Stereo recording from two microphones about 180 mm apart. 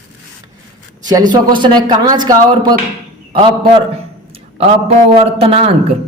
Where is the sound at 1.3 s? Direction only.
25° right (ahead or behind).